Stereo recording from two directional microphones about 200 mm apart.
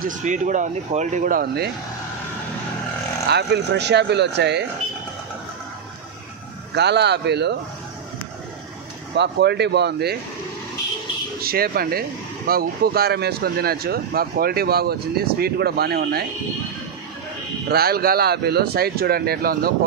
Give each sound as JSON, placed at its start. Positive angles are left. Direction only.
{"t": 0.0, "sound": "speech", "side_deg": -40}
{"t": 3.3, "sound": "speech", "side_deg": -55}
{"t": 6.7, "sound": "speech", "side_deg": -55}
{"t": 9.1, "sound": "speech", "side_deg": -60}
{"t": 11.4, "sound": "speech", "side_deg": -50}
{"t": 17.6, "sound": "speech", "side_deg": -50}